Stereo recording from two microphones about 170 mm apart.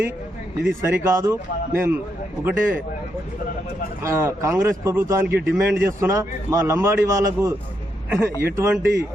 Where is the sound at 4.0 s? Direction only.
15° right (ahead or behind).